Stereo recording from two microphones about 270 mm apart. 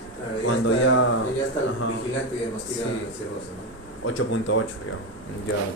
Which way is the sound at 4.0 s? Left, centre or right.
Left.